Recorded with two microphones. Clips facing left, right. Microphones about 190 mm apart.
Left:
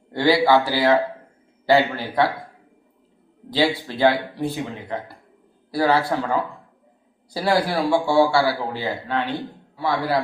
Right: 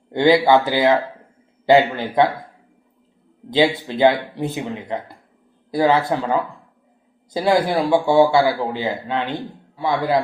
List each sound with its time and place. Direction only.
0.1 s a man's voice: 20° right (ahead or behind)
3.5 s a man's voice: 20° right (ahead or behind)
7.3 s a man's voice: 20° right (ahead or behind)